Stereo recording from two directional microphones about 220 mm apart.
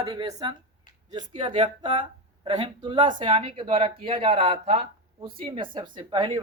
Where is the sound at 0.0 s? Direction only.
20° right (ahead or behind).